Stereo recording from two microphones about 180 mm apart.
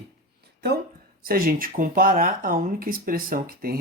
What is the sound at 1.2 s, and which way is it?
Speech, 55° right (ahead or behind).